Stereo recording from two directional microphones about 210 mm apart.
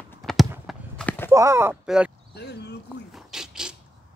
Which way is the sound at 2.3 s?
50° left (ahead or behind).